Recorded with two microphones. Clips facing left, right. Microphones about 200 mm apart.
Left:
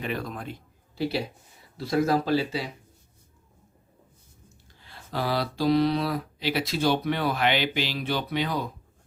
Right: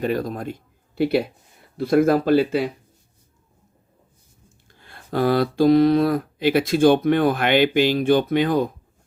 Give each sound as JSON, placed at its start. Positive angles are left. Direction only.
{"t": 0.0, "sound": "speech", "side_deg": -40}
{"t": 0.9, "sound": "speech", "side_deg": -55}
{"t": 4.7, "sound": "speech", "side_deg": -55}